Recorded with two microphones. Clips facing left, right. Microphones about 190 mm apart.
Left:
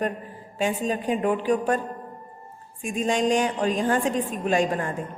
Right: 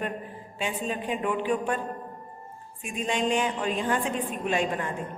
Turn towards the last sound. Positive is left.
turn(degrees=40)  # may be behind; listen again after turning